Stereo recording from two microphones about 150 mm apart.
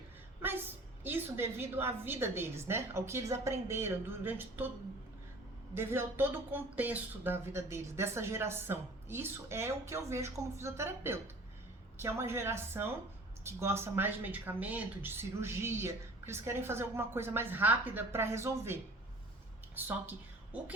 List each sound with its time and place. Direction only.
1.0 s speech: 15° right (ahead or behind)
5.7 s a woman's voice: 15° right (ahead or behind)